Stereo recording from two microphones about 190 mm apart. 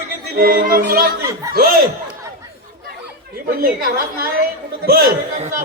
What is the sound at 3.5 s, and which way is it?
A man's voice, 50° right (ahead or behind).